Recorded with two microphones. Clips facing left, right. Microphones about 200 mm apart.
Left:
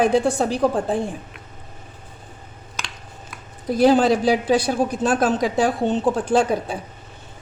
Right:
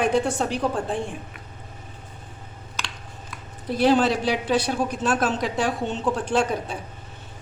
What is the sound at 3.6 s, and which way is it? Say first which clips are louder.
Speech: left 4 dB; 40° left (ahead or behind).